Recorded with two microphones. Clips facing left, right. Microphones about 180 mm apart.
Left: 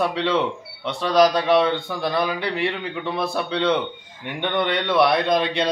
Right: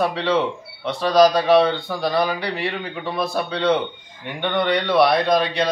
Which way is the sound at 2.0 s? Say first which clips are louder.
Right 3 dB; 20° left (ahead or behind).